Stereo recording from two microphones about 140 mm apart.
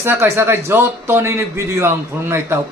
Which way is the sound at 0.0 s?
15° right (ahead or behind).